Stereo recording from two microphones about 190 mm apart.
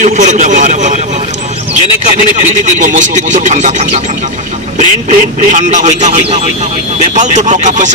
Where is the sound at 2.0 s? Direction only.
40° right (ahead or behind).